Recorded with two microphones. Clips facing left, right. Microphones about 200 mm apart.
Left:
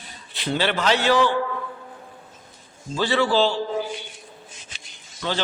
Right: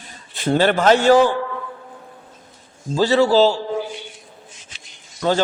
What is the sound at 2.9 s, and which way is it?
Speech, 40° right (ahead or behind).